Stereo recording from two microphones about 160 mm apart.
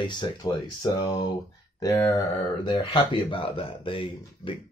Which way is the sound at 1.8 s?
20° left (ahead or behind).